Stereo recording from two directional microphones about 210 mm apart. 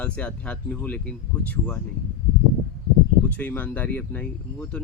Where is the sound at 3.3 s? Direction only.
10° left (ahead or behind).